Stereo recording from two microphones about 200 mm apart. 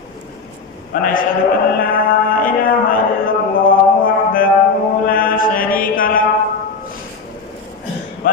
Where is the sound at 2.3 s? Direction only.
45° left (ahead or behind).